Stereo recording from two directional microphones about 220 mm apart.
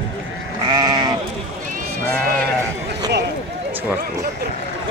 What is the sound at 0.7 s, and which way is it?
Sheep, 20° right (ahead or behind).